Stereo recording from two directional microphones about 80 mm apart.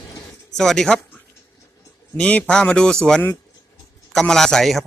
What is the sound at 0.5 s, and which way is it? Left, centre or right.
Speech, centre.